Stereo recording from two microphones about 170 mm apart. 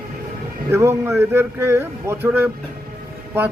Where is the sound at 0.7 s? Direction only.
15° right (ahead or behind).